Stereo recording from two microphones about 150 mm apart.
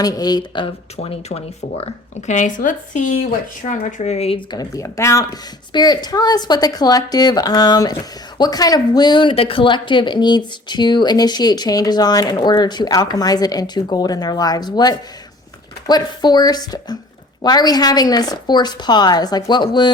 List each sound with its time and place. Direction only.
0.0 s speech: 25° left (ahead or behind)
0.9 s speech: 45° left (ahead or behind)
4.5 s speech: 20° left (ahead or behind)